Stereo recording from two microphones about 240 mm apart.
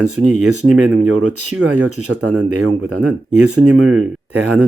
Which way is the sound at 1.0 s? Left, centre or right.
Right.